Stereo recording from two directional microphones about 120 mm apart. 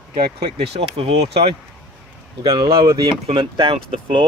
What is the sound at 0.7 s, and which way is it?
Speech, 55° right (ahead or behind).